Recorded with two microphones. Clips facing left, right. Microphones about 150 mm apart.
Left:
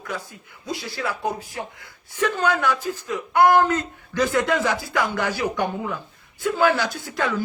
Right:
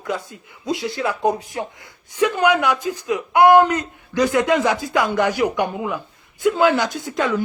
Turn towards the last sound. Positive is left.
turn(degrees=-20)  # may be behind; listen again after turning